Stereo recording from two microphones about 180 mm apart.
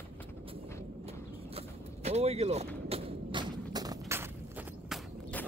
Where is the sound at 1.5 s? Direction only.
35° right (ahead or behind).